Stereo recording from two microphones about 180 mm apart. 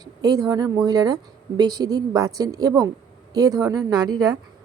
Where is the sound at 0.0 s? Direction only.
20° right (ahead or behind).